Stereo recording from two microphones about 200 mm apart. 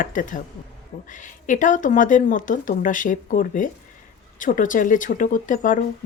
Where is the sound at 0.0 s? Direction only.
40° left (ahead or behind).